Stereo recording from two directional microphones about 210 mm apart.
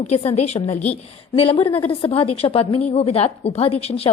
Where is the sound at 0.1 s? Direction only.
30° left (ahead or behind).